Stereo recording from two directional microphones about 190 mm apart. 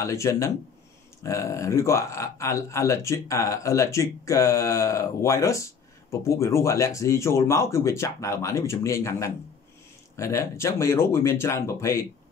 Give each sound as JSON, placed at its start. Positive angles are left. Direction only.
{"t": 0.0, "sound": "speech", "side_deg": 15}